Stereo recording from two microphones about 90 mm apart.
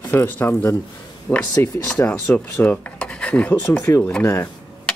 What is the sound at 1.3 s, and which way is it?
Speech, 40° left (ahead or behind).